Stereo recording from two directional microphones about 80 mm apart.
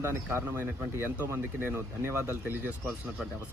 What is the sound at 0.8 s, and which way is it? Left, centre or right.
Speech, centre.